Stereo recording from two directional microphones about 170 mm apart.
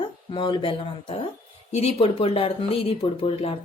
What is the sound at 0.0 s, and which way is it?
Speech, 30° left (ahead or behind).